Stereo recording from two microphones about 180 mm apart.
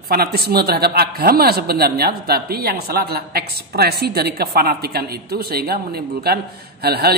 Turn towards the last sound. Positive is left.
turn(degrees=-60)  # may be behind; listen again after turning